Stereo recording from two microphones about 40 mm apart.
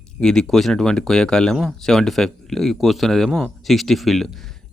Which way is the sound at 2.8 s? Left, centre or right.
Centre.